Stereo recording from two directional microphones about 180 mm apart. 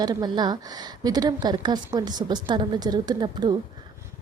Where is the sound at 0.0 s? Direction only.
20° right (ahead or behind).